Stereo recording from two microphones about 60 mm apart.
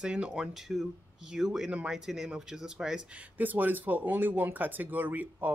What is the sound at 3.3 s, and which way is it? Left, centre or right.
Speech, right.